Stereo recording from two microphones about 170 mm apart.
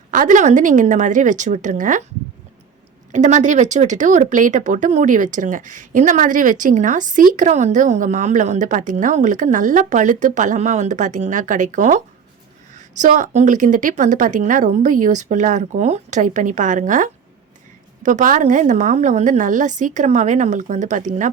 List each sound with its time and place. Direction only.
0.1 s a woman's voice: 50° right (ahead or behind)
3.1 s a woman's voice: 45° right (ahead or behind)